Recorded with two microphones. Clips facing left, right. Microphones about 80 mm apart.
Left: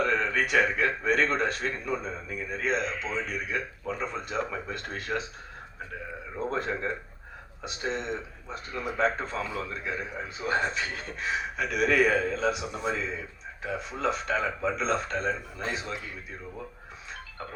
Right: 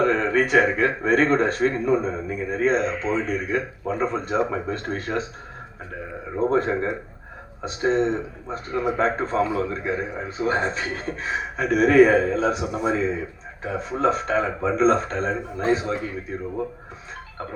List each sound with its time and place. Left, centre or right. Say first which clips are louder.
0.0 s a man's voice: right 7 dB; right
6.4 s a man's voice: right 9 dB; right